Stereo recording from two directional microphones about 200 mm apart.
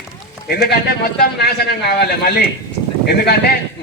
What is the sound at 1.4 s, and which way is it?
A man's voice, 50° left (ahead or behind).